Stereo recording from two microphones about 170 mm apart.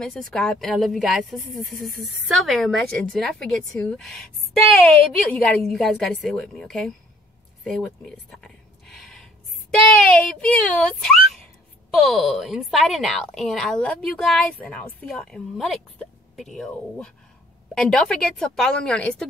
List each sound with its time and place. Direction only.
0.0 s a woman's voice: 5° left (ahead or behind)
8.4 s a sound: 5° left (ahead or behind)
10.1 s a woman's voice: 5° left (ahead or behind)